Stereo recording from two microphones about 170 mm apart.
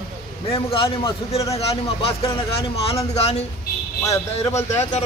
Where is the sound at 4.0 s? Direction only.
20° left (ahead or behind).